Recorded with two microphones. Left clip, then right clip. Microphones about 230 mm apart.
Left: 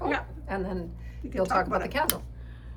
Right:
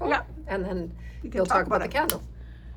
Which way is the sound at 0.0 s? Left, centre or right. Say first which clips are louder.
Right 4 dB; centre.